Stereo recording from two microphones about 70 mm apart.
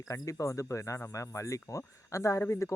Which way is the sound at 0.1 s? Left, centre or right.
Left.